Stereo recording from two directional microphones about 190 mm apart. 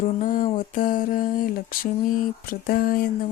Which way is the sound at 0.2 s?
45° left (ahead or behind).